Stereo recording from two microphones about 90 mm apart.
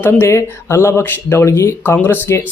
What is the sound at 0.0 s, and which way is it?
Speech, 30° left (ahead or behind).